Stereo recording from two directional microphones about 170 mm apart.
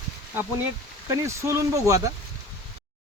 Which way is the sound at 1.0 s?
15° right (ahead or behind).